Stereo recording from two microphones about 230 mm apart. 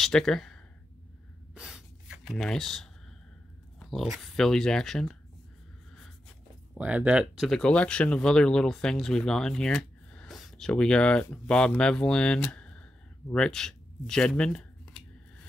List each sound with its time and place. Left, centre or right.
0.0 s speech: centre
1.5 s gasp: centre
3.8 s speech: centre